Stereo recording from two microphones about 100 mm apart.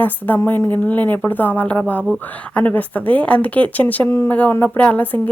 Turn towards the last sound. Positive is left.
turn(degrees=15)  # may be behind; listen again after turning